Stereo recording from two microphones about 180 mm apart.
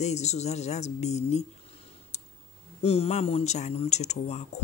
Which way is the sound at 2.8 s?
35° left (ahead or behind).